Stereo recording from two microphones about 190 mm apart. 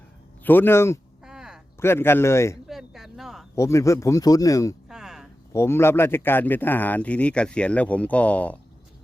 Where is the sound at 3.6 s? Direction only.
15° left (ahead or behind).